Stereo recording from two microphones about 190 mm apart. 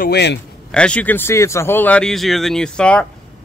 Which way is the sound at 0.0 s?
60° left (ahead or behind).